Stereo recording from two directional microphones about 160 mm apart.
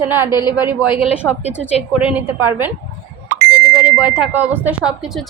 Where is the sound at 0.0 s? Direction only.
15° right (ahead or behind).